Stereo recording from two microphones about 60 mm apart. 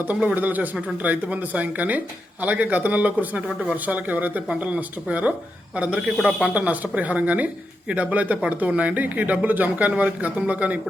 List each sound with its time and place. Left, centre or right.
0.3 s speech: right